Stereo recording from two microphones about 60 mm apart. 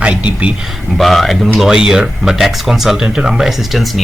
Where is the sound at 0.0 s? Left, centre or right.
Right.